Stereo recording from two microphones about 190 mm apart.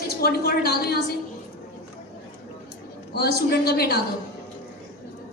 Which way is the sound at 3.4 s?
55° left (ahead or behind).